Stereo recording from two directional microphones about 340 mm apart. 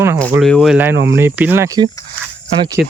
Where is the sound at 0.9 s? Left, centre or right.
Right.